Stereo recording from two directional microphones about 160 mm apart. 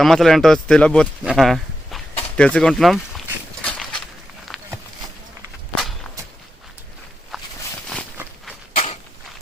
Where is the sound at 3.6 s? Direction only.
5° left (ahead or behind).